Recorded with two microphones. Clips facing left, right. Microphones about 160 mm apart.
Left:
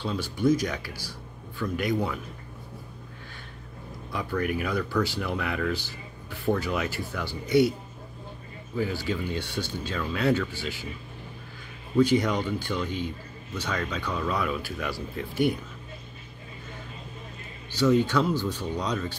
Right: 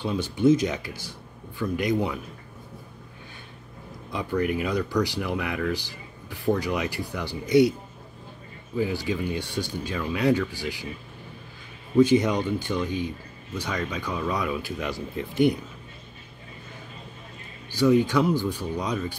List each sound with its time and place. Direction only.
0.0 s speech: 20° right (ahead or behind)
4.1 s speech: 15° right (ahead or behind)
8.7 s speech: 15° right (ahead or behind)
12.0 s speech: 20° right (ahead or behind)
17.7 s speech: 15° right (ahead or behind)